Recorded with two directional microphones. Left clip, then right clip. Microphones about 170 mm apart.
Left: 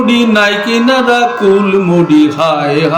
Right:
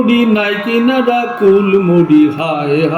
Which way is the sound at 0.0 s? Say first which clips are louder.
Left 2 dB; 45° left (ahead or behind).